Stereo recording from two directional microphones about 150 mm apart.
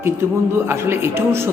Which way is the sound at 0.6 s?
15° right (ahead or behind).